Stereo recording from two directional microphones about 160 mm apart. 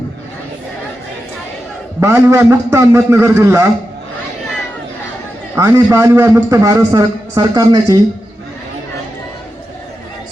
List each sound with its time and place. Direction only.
2.0 s a man's voice: 15° right (ahead or behind)
5.5 s a man's voice: 15° right (ahead or behind)